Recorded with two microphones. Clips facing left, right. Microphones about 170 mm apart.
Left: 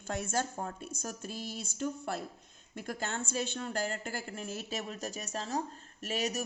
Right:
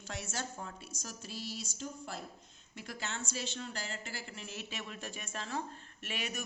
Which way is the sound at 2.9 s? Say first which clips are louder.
Left 5 dB; 45° left (ahead or behind).